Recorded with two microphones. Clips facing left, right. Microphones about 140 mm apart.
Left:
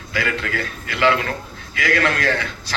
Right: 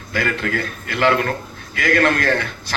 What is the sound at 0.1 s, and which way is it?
A man's voice, 50° right (ahead or behind).